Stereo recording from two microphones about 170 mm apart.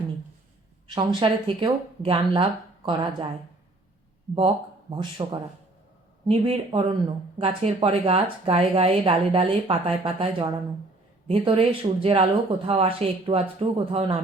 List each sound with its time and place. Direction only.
0.9 s speech: 25° right (ahead or behind)
4.4 s speech: 30° right (ahead or behind)